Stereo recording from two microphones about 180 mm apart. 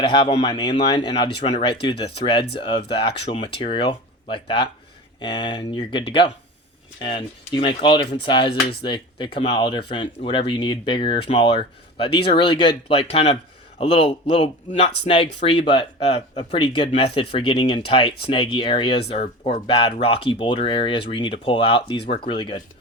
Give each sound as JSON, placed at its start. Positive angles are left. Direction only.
{"t": 0.0, "sound": "speech", "side_deg": 30}